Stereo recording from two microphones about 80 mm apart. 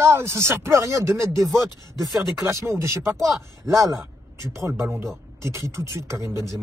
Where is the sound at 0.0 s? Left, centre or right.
Right.